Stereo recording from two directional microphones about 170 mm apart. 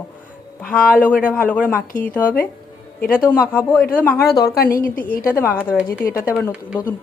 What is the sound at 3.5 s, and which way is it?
A woman's voice, 10° left (ahead or behind).